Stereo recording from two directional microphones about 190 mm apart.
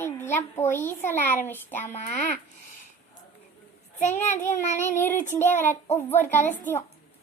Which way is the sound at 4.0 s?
40° left (ahead or behind).